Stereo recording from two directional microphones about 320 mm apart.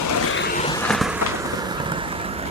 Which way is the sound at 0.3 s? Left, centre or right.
Left.